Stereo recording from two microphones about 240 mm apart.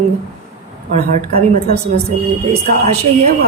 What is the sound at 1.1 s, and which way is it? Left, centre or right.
Speech, right.